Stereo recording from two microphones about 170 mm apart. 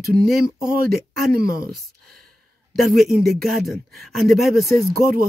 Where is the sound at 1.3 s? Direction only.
60° right (ahead or behind).